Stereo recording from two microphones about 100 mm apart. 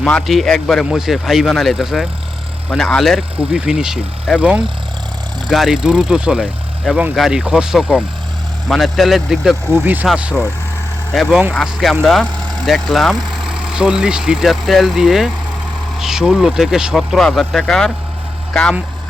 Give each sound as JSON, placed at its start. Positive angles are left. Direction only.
{"t": 0.0, "sound": "speech", "side_deg": 5}
{"t": 9.7, "sound": "speech", "side_deg": -15}
{"t": 11.1, "sound": "speech", "side_deg": 0}